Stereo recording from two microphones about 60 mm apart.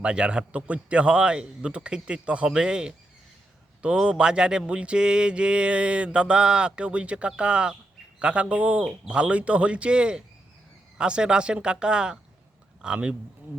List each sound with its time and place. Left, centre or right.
0.0 s mantra: centre
4.0 s mantra: centre
8.2 s speech: centre
10.9 s mantra: centre
12.8 s speech: centre